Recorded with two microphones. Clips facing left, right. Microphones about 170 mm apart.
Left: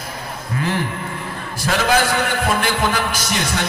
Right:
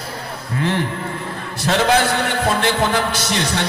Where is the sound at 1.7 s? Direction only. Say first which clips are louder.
Right 2 dB; 25° right (ahead or behind).